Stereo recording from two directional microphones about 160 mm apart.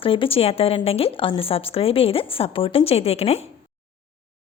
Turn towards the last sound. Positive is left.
turn(degrees=40)  # may be behind; listen again after turning